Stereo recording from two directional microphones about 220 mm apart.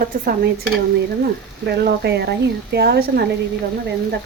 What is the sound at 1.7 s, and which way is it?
Speech, 50° right (ahead or behind).